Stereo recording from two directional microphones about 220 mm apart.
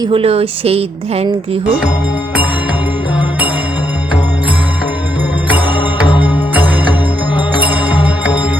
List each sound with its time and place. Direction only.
0.0 s a woman's voice: 25° right (ahead or behind)